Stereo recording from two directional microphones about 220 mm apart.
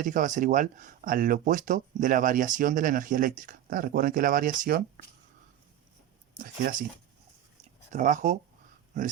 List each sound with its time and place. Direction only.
0.0 s speech: 35° right (ahead or behind)
6.4 s speech: 40° right (ahead or behind)
7.6 s a sound: 35° right (ahead or behind)